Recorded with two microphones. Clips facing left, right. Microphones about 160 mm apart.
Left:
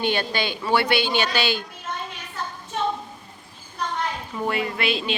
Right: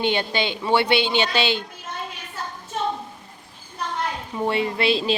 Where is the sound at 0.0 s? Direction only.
20° right (ahead or behind).